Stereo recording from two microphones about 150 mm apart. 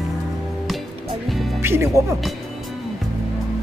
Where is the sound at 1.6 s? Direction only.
15° right (ahead or behind).